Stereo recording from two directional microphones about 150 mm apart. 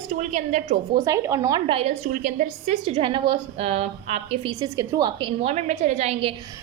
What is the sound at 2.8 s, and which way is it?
A woman's voice, 35° right (ahead or behind).